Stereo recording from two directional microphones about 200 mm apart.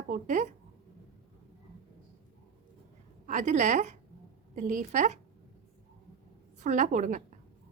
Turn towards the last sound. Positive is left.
turn(degrees=-40)  # may be behind; listen again after turning